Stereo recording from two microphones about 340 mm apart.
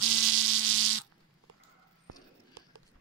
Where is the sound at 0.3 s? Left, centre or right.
Right.